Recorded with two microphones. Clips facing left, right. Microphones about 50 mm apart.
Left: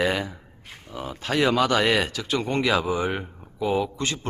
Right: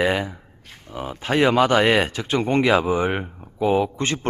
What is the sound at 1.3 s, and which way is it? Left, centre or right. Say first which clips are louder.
Speech: right 4 dB; right.